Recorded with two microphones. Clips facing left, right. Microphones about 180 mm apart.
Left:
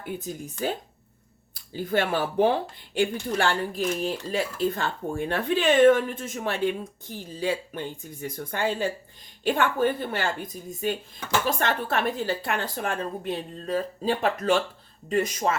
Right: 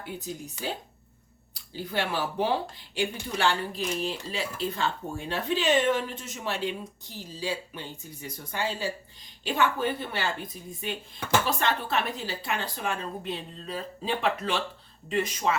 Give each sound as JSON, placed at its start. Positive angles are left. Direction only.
{"t": 0.0, "sound": "speech", "side_deg": 50}
{"t": 1.5, "sound": "speech", "side_deg": 50}